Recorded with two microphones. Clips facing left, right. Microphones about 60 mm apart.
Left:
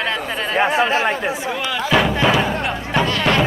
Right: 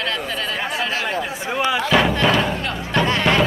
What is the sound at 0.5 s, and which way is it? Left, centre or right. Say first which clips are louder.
Chatter: left 11 dB; left.